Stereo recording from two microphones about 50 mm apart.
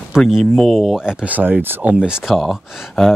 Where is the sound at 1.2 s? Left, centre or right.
Right.